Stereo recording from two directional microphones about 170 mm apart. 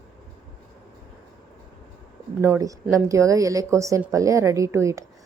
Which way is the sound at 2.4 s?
15° right (ahead or behind).